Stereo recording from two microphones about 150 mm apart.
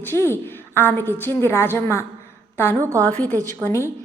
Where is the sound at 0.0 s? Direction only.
15° left (ahead or behind).